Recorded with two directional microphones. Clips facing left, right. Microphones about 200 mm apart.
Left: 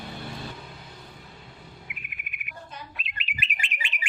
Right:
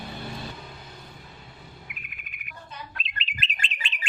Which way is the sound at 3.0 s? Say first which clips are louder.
Right 1 dB; 10° left (ahead or behind).